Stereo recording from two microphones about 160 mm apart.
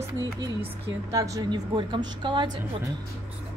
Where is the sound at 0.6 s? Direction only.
20° right (ahead or behind).